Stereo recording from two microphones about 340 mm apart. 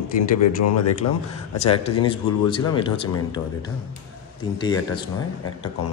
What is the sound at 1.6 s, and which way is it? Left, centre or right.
Speech, centre.